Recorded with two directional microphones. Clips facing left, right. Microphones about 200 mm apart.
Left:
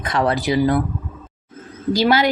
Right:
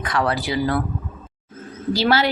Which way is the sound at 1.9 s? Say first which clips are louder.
Left 2 dB; 15° left (ahead or behind).